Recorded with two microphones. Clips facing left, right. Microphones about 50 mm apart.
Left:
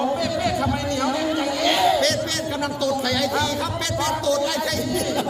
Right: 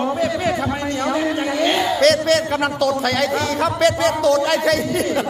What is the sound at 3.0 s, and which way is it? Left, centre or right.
A man's voice, right.